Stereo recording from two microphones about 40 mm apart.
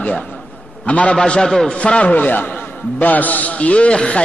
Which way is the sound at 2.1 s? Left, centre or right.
Left.